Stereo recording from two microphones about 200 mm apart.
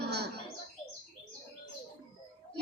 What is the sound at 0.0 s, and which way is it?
Bird, 55° right (ahead or behind).